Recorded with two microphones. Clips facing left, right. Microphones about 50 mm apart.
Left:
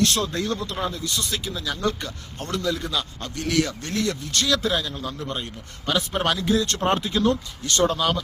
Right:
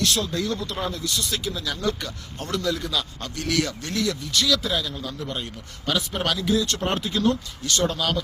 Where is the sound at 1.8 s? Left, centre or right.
Left.